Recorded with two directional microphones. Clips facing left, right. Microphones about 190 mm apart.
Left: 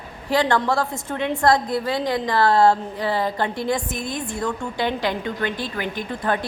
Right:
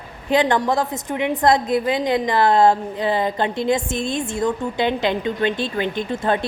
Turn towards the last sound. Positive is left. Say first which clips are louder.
# right 3 dB
turn(degrees=-25)  # may be behind; listen again after turning